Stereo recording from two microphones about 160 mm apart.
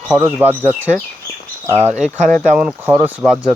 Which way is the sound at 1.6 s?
15° right (ahead or behind).